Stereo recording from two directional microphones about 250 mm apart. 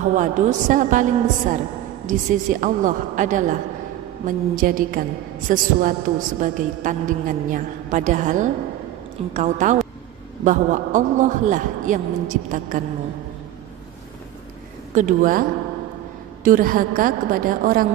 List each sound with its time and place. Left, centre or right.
0.0 s a woman's voice: right
4.6 s a woman's voice: right
15.0 s a woman's voice: right
16.4 s a woman's voice: right